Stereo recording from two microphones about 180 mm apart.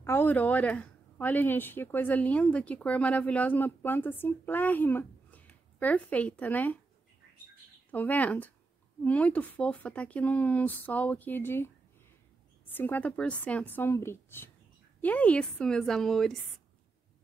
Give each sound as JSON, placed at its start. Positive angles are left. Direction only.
{"t": 0.0, "sound": "speech", "side_deg": 10}
{"t": 7.9, "sound": "speech", "side_deg": 10}
{"t": 12.7, "sound": "a woman's voice", "side_deg": 10}